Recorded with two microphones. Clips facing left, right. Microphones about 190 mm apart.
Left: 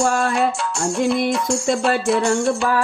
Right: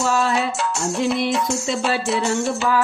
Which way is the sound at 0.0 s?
50° left (ahead or behind).